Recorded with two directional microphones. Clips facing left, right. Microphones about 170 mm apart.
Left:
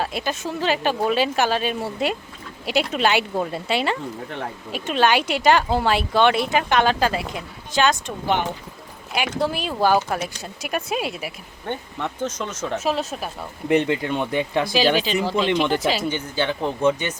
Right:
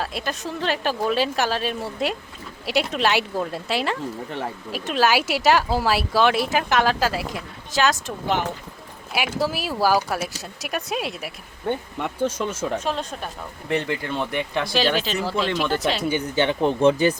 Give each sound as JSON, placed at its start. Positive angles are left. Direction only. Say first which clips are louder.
{"t": 0.0, "sound": "a woman's voice", "louder": "left 2 dB", "side_deg": 0}
{"t": 11.9, "sound": "speech", "louder": "right 2 dB", "side_deg": -10}
{"t": 12.8, "sound": "a woman's voice", "louder": "left 3 dB", "side_deg": 5}
{"t": 13.7, "sound": "speech", "louder": "left 5 dB", "side_deg": 20}
{"t": 14.7, "sound": "a woman's voice", "louder": "left 2 dB", "side_deg": 0}
{"t": 16.0, "sound": "speech", "louder": "right 2 dB", "side_deg": -15}